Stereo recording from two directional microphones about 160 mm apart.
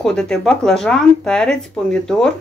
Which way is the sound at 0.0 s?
5° left (ahead or behind).